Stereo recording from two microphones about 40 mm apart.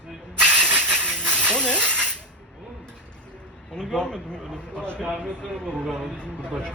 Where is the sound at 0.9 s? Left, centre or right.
Right.